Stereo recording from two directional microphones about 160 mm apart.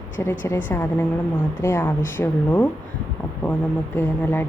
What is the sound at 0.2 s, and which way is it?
Speech, 15° left (ahead or behind).